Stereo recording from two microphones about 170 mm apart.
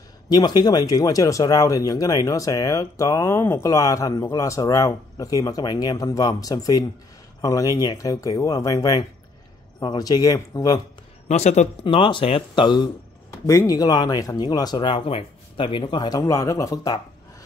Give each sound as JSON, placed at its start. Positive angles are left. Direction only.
{"t": 0.3, "sound": "speech", "side_deg": 25}
{"t": 11.2, "sound": "speech", "side_deg": 40}
{"t": 11.8, "sound": "speech", "side_deg": 30}